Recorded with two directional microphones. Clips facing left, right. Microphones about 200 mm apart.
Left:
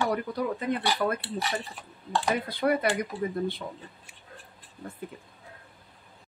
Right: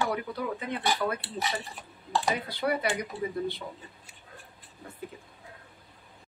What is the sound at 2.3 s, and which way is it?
Speech, 50° left (ahead or behind).